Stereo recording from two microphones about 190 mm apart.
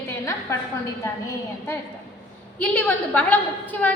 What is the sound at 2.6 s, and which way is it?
A woman's voice, 10° left (ahead or behind).